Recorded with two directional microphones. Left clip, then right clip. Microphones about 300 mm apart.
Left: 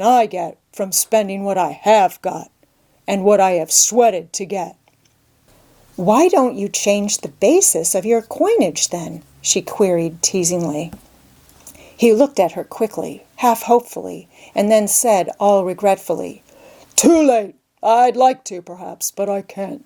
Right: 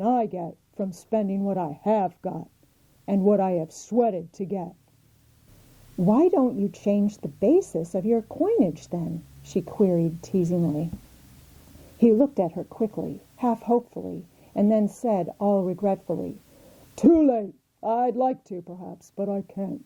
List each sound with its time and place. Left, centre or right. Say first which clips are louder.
0.0 s a woman's voice: left 11 dB; centre
6.1 s speech: left 8 dB; centre
10.5 s speech: left 6 dB; centre
11.9 s a woman's voice: left 8 dB; centre